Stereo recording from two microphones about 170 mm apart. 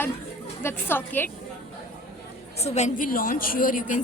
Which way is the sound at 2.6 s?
40° left (ahead or behind).